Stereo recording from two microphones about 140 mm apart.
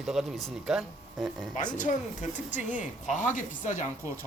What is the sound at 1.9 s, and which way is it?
Speech, 65° left (ahead or behind).